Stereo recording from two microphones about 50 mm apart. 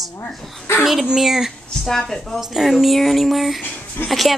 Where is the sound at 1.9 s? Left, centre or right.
Centre.